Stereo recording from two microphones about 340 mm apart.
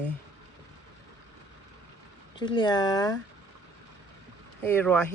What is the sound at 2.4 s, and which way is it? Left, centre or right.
Speech, centre.